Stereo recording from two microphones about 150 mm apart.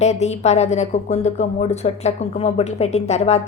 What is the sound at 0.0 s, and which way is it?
A woman's voice, 50° left (ahead or behind).